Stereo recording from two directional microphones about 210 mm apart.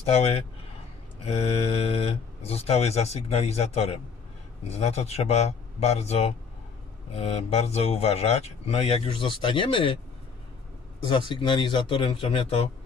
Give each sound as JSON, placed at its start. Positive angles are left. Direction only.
{"t": 0.0, "sound": "speech", "side_deg": 30}
{"t": 11.1, "sound": "speech", "side_deg": 25}